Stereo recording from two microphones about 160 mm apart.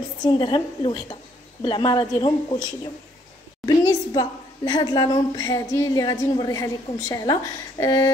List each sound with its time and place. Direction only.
0.2 s a woman's voice: 30° left (ahead or behind)
3.6 s a woman's voice: 25° left (ahead or behind)